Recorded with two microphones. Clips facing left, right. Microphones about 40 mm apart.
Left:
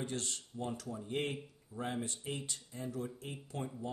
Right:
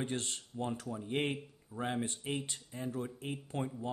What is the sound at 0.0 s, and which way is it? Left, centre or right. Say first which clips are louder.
Speech: right 2 dB; right.